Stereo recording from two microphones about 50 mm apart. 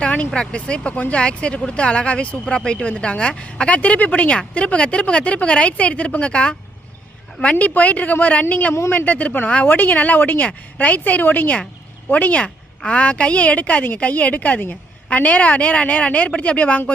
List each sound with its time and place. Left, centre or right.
0.0 s vehicle: left
0.3 s a woman's voice: left
7.6 s a woman's voice: left